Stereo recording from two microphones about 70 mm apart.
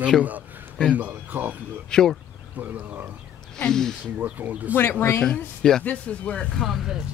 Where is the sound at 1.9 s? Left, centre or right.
Centre.